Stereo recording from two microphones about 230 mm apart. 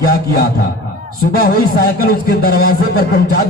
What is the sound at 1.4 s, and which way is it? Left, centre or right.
Speech, left.